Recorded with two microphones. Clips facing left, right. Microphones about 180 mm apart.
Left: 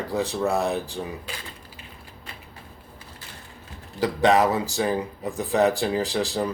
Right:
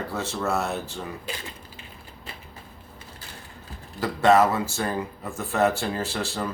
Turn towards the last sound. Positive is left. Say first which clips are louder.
# left 4 dB
turn(degrees=15)  # may be behind; listen again after turning